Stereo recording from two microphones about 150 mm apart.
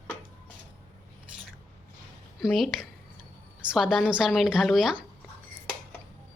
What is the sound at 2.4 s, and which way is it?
Speech, centre (ahead or behind).